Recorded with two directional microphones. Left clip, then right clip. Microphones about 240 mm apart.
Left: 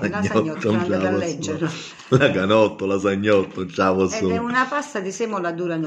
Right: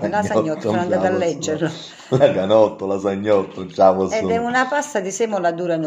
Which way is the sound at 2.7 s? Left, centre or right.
Left.